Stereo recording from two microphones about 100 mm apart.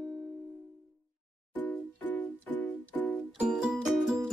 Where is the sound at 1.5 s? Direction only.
15° left (ahead or behind).